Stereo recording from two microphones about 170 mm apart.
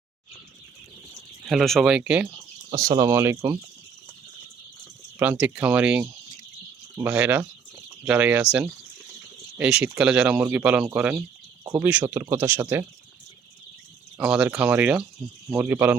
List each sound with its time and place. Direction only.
1.5 s speech: centre (ahead or behind)
2.6 s speech: 25° right (ahead or behind)
5.2 s speech: 10° right (ahead or behind)
9.6 s speech: 5° right (ahead or behind)
11.6 s speech: 20° right (ahead or behind)
14.2 s speech: 5° right (ahead or behind)